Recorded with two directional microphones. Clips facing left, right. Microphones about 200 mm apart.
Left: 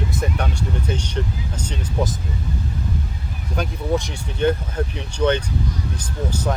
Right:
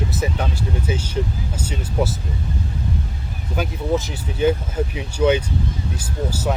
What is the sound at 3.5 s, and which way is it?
Speech, 5° right (ahead or behind).